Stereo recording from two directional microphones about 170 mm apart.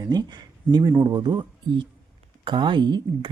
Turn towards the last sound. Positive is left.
turn(degrees=-25)  # may be behind; listen again after turning